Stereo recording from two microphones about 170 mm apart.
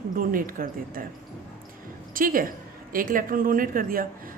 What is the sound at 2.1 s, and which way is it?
A woman's voice, 55° right (ahead or behind).